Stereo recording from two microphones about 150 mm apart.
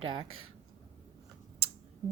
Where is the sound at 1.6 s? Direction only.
40° right (ahead or behind).